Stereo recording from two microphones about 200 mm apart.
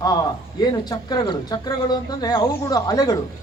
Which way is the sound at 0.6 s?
20° left (ahead or behind).